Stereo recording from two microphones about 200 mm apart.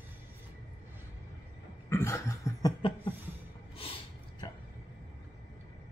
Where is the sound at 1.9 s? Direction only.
15° left (ahead or behind).